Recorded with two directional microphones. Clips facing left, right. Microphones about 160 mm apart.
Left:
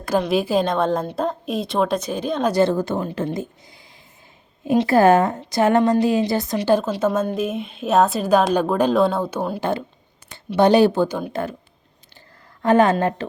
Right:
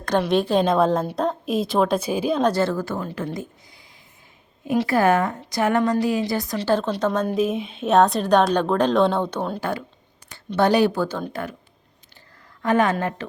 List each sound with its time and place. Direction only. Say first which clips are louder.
0.2 s a woman's voice: even; 5° left (ahead or behind)
2.5 s a woman's voice: left 4 dB; 20° left (ahead or behind)
9.6 s a woman's voice: left 4 dB; 25° left (ahead or behind)
12.6 s a woman's voice: left 4 dB; 30° left (ahead or behind)